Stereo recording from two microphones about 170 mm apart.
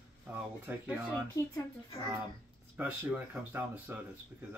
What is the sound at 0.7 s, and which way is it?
Speech, 10° right (ahead or behind).